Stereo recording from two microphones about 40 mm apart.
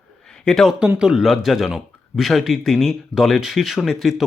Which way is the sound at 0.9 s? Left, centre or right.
Centre.